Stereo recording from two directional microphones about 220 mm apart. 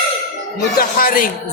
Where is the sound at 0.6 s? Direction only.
40° left (ahead or behind).